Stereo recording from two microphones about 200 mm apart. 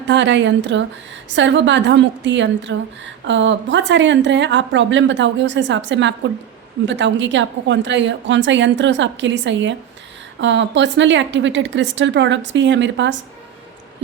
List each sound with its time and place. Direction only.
0.1 s a woman's voice: 60° right (ahead or behind)